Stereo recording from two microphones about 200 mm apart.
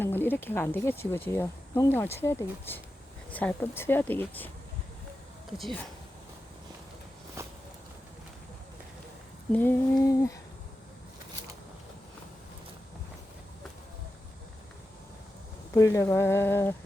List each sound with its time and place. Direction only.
0.0 s speech: 10° left (ahead or behind)
5.5 s speech: centre (ahead or behind)
7.4 s a sound: 15° right (ahead or behind)
9.5 s speech: 10° left (ahead or behind)
15.7 s speech: 15° left (ahead or behind)